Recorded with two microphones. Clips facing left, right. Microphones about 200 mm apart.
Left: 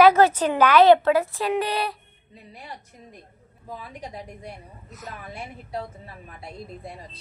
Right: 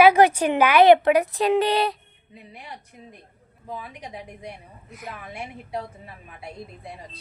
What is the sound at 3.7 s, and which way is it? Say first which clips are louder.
A woman's voice: right 1 dB; 15° right (ahead or behind).